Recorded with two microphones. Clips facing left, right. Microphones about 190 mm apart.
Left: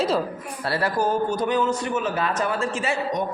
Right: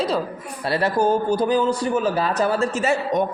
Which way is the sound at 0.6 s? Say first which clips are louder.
Right 4 dB; 20° right (ahead or behind).